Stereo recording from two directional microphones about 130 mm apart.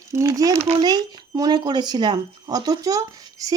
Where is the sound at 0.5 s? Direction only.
50° right (ahead or behind).